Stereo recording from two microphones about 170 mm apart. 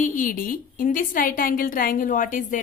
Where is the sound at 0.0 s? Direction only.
50° left (ahead or behind).